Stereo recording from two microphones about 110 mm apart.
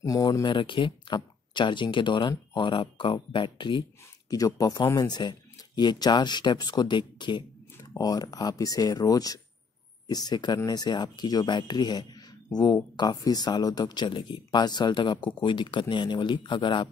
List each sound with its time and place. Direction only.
0.0 s speech: 35° left (ahead or behind)
4.3 s speech: 30° left (ahead or behind)
7.7 s speech: 30° left (ahead or behind)